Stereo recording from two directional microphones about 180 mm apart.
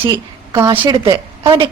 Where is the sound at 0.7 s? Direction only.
25° right (ahead or behind).